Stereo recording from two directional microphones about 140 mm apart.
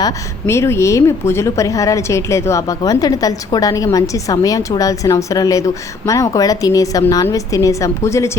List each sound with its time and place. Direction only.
0.0 s a woman's voice: 20° left (ahead or behind)